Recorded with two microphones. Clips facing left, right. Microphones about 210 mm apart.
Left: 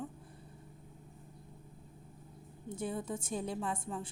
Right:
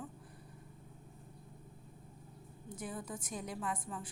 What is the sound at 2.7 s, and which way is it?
A woman's voice, 25° left (ahead or behind).